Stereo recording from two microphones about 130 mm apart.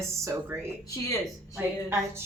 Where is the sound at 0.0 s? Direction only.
20° right (ahead or behind).